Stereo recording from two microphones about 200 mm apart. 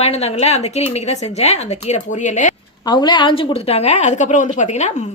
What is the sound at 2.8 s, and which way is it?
A woman's voice, 20° left (ahead or behind).